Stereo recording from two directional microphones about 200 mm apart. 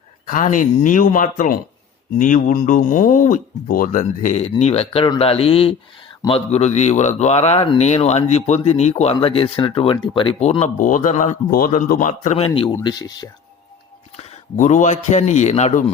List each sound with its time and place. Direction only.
0.3 s speech: 40° left (ahead or behind)
12.5 s speech: 25° left (ahead or behind)
14.2 s a man's voice: 40° left (ahead or behind)